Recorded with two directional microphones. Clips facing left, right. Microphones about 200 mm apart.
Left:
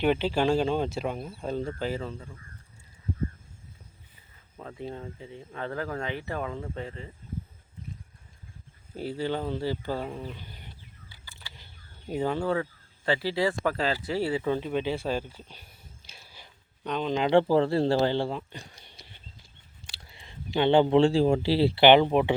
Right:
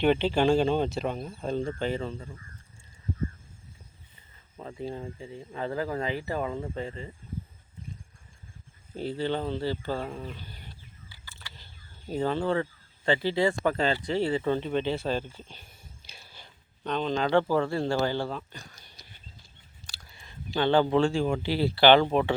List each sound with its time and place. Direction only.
0.0 s speech: 5° left (ahead or behind)
4.5 s speech: centre (ahead or behind)
9.0 s speech: 10° left (ahead or behind)
10.3 s a sound: 15° left (ahead or behind)
13.1 s speech: 5° left (ahead or behind)
16.0 s a sound: 5° left (ahead or behind)
17.2 s speech: 25° left (ahead or behind)